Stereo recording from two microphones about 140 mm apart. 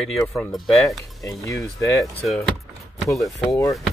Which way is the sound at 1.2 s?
20° left (ahead or behind).